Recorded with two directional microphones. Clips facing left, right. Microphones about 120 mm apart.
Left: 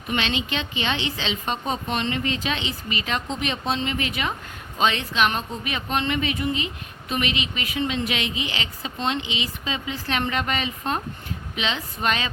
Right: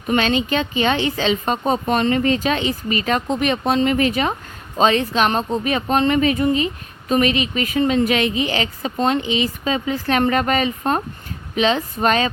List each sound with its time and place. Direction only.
0.1 s speech: 45° right (ahead or behind)